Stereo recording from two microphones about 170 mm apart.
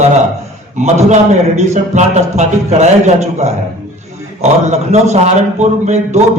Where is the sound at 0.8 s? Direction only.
40° right (ahead or behind).